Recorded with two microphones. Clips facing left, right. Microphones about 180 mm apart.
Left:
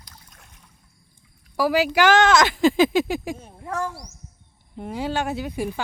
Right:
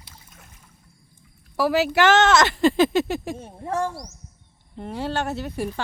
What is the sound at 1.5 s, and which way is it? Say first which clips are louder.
Speech: even; 5° right (ahead or behind).